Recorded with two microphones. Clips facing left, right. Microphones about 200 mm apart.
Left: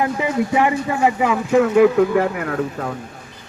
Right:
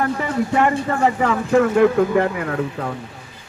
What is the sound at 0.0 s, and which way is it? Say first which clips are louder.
A man's voice: left 1 dB; 10° left (ahead or behind).